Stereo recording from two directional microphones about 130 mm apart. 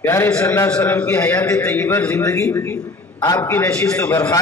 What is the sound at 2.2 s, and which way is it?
A man's voice, 25° left (ahead or behind).